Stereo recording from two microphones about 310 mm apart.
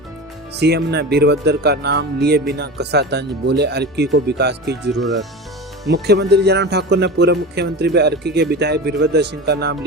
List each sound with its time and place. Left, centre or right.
0.6 s speech: right
4.9 s speech: centre
5.9 s speech: right